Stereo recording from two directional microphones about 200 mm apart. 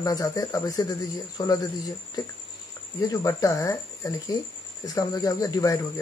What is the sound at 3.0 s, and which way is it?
Speech, 15° left (ahead or behind).